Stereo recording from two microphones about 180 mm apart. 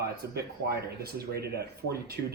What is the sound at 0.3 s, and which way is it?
Speech, 60° right (ahead or behind).